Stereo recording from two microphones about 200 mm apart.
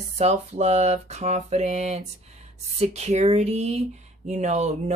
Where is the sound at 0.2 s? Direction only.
30° right (ahead or behind).